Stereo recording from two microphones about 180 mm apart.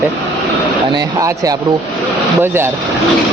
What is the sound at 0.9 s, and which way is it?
A man's voice, 20° right (ahead or behind).